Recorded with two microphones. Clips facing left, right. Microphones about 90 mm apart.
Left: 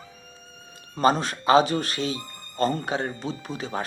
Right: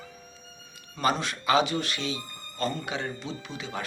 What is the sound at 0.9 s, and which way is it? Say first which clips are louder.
Speech: left 6 dB; 40° left (ahead or behind).